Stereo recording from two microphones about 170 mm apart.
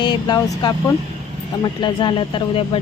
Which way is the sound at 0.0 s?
25° left (ahead or behind).